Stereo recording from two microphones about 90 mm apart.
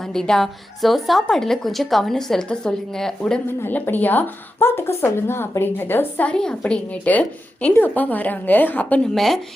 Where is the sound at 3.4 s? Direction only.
25° left (ahead or behind).